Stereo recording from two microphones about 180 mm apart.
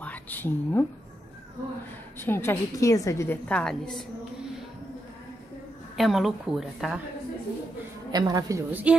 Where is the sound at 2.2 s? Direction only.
15° left (ahead or behind).